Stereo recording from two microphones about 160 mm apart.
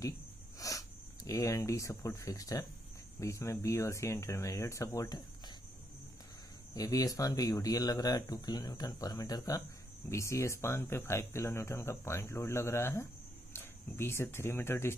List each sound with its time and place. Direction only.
0.6 s speech: 20° left (ahead or behind)
6.7 s speech: 20° left (ahead or behind)